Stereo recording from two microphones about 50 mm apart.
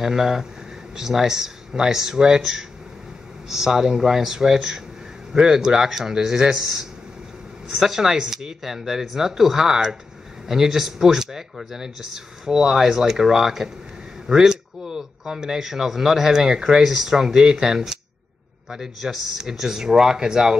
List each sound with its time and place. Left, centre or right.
0.0 s speech: centre